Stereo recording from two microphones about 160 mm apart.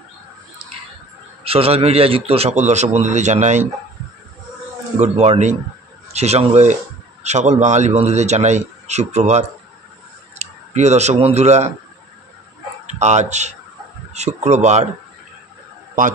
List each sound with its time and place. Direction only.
1.4 s a man's voice: 35° right (ahead or behind)
4.9 s a man's voice: 40° right (ahead or behind)
13.0 s a man's voice: 45° right (ahead or behind)